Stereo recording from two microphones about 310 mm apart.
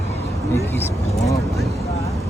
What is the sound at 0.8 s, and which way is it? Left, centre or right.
Vehicle, centre.